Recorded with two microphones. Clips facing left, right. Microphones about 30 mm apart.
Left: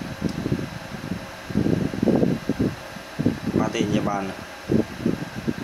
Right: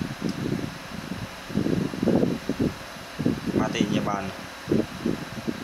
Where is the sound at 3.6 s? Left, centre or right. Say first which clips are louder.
Left 2 dB; centre.